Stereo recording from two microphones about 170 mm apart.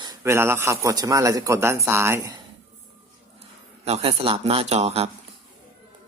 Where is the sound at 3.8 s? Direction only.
35° right (ahead or behind).